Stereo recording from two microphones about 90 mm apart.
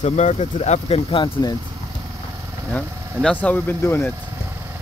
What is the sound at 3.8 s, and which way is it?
Speech, 30° left (ahead or behind).